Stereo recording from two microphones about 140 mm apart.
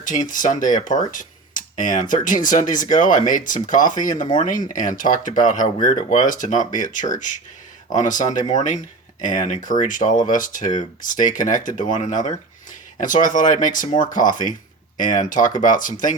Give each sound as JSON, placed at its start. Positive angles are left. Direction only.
{"t": 0.0, "sound": "speech", "side_deg": 70}
{"t": 7.9, "sound": "speech", "side_deg": 60}